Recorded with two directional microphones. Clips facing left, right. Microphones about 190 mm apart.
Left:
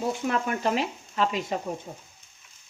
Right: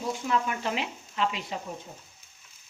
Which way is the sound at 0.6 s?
40° left (ahead or behind).